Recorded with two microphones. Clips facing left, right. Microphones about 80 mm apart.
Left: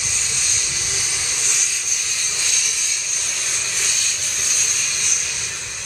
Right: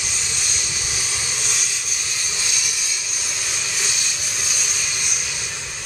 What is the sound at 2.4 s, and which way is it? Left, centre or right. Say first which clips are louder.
Vehicle: even; centre.